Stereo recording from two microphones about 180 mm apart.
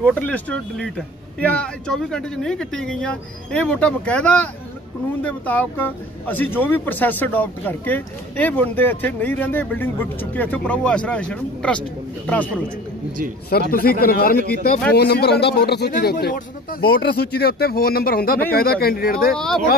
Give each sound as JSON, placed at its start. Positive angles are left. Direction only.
{"t": 0.0, "sound": "speech", "side_deg": 10}
{"t": 13.5, "sound": "speech", "side_deg": 55}
{"t": 19.3, "sound": "speech", "side_deg": 5}